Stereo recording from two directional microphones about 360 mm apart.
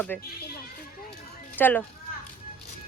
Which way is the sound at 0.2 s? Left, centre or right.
Left.